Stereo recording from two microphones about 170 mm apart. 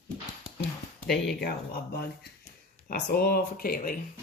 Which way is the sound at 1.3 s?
65° left (ahead or behind).